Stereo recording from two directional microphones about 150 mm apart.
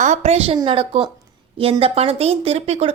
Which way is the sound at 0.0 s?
50° right (ahead or behind).